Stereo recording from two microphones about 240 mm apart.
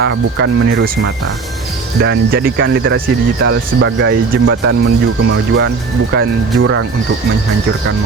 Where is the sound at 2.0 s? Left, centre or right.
Right.